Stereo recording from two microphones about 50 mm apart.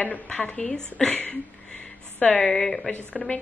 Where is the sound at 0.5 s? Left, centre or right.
Centre.